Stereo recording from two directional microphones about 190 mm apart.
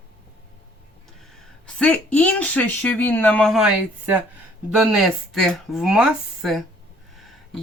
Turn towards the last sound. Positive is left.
turn(degrees=0)  # may be behind; listen again after turning